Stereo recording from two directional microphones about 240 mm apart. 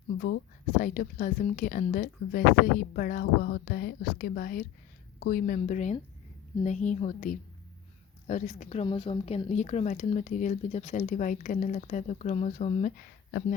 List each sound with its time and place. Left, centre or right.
0.8 s speech: left